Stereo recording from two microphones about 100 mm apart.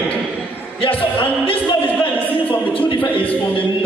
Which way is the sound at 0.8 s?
65° left (ahead or behind).